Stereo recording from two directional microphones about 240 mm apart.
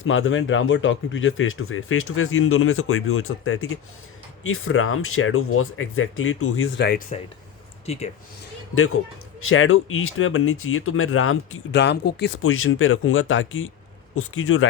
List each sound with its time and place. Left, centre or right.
0.0 s speech: left
7.9 s speech: left
8.7 s speech: left